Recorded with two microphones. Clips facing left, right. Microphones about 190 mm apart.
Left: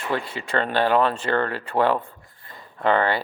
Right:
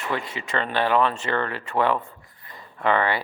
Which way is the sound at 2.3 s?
25° left (ahead or behind).